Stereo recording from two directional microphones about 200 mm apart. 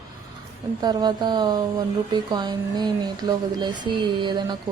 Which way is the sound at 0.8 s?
20° right (ahead or behind).